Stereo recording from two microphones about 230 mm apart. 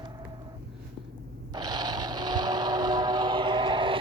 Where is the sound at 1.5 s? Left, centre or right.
Centre.